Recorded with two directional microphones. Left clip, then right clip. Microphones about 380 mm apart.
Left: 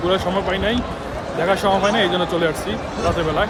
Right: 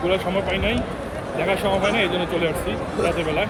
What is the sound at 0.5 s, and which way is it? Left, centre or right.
Speech, left.